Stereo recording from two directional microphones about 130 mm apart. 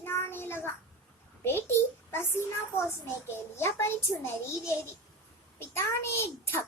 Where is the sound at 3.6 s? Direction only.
20° left (ahead or behind).